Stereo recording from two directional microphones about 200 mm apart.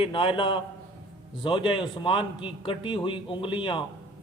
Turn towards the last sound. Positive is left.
turn(degrees=25)  # may be behind; listen again after turning